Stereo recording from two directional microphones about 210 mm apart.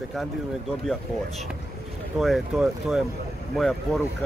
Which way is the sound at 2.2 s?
Centre (ahead or behind).